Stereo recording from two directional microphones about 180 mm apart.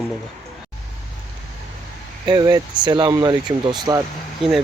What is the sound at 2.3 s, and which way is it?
Speech, 20° right (ahead or behind).